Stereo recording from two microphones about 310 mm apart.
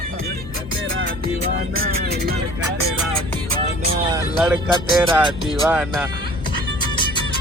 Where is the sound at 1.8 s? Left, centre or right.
Right.